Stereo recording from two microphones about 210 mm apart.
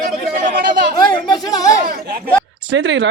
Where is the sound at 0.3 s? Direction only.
40° right (ahead or behind).